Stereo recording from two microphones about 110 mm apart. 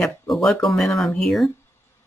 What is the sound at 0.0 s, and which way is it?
Speech, centre (ahead or behind).